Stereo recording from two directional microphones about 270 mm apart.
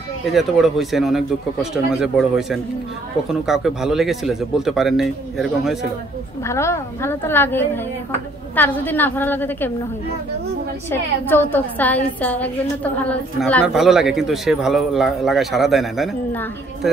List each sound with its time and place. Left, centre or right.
0.3 s a woman's voice: centre
6.4 s a woman's voice: centre
10.9 s a woman's voice: centre